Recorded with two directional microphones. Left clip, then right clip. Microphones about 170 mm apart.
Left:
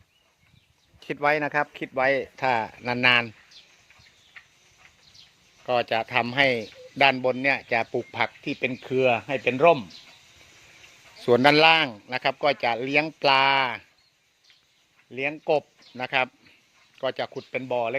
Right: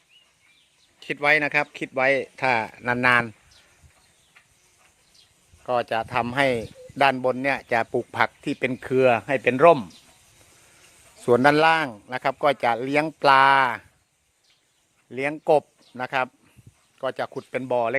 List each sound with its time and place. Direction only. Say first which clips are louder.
0.9 s speech: right 3 dB; centre (ahead or behind)
1.7 s a man's voice: right 2 dB; 20° right (ahead or behind)
5.6 s a man's voice: even; centre (ahead or behind); by 9.9 s 30° right (ahead or behind)
11.2 s a man's voice: even; 10° right (ahead or behind)
15.1 s a man's voice: right 4 dB; 20° right (ahead or behind)
16.0 s a man's voice: even; 10° right (ahead or behind); by 17.9 s 25° right (ahead or behind)